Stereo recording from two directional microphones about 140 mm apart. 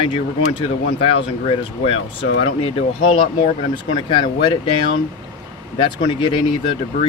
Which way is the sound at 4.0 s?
35° left (ahead or behind).